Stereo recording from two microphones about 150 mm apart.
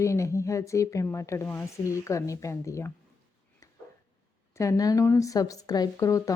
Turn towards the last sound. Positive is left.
turn(degrees=20)  # may be behind; listen again after turning